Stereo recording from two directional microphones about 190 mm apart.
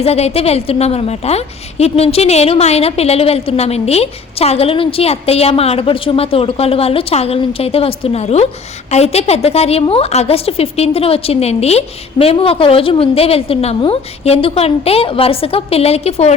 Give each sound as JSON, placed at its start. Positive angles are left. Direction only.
{"t": 0.0, "sound": "a woman's voice", "side_deg": 35}